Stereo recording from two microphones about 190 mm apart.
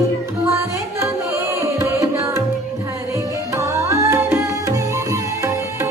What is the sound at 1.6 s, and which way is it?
Tabla, 15° right (ahead or behind).